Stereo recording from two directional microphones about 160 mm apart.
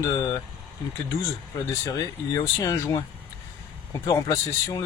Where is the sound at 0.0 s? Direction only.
20° left (ahead or behind).